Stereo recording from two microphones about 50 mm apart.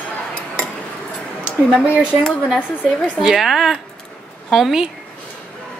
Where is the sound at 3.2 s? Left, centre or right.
Centre.